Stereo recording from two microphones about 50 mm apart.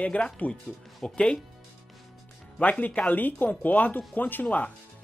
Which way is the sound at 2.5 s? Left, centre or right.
Left.